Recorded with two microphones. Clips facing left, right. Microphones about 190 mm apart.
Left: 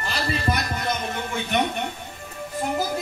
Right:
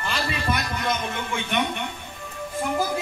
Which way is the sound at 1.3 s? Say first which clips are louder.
Left 2 dB; 40° left (ahead or behind).